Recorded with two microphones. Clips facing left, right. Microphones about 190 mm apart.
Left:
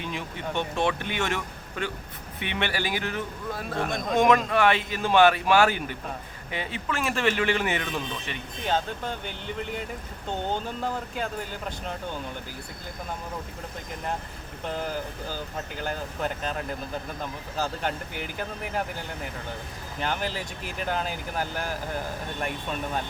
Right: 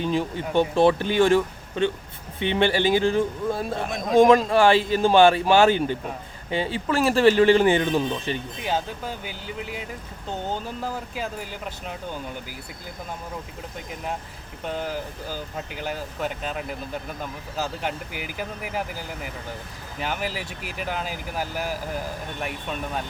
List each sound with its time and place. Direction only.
0.0 s a man's voice: 35° right (ahead or behind)
3.8 s speech: centre (ahead or behind)
4.2 s speech: 35° right (ahead or behind)
8.6 s speech: 5° right (ahead or behind)
14.6 s speech: centre (ahead or behind)